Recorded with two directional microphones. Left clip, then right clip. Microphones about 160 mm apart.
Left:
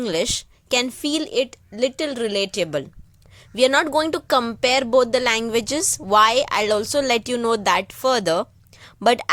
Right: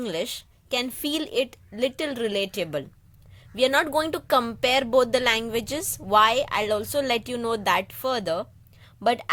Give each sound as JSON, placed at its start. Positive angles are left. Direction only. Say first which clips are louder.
{"t": 0.0, "sound": "a woman's voice", "louder": "left 7 dB", "side_deg": 30}
{"t": 1.0, "sound": "speech", "louder": "left 4 dB", "side_deg": 20}